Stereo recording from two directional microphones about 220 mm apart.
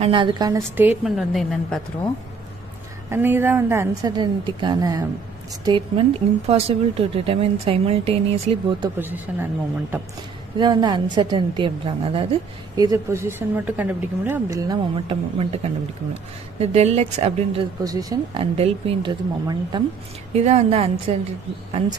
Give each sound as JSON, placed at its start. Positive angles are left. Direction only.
{"t": 0.0, "sound": "a woman's voice", "side_deg": -20}
{"t": 3.1, "sound": "a woman's voice", "side_deg": -10}
{"t": 9.0, "sound": "a woman's voice", "side_deg": -10}
{"t": 10.6, "sound": "a woman's voice", "side_deg": -20}